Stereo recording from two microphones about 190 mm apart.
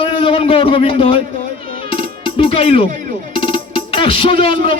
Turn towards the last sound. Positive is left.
turn(degrees=30)  # may be behind; listen again after turning